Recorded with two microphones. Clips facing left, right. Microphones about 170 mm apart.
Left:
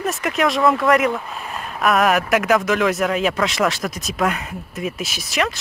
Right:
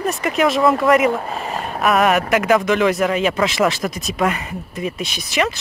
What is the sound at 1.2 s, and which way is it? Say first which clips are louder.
Speech: right 6 dB; 70° right (ahead or behind).